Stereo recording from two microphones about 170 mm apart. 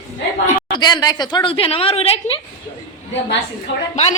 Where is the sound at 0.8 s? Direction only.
25° left (ahead or behind).